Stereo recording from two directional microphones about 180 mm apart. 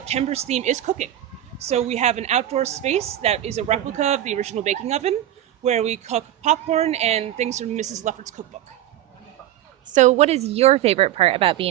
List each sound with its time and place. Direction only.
0.0 s a woman's voice: 35° right (ahead or behind)
9.8 s a woman's voice: 40° right (ahead or behind)